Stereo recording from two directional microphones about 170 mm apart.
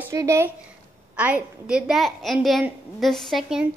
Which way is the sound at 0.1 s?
20° right (ahead or behind).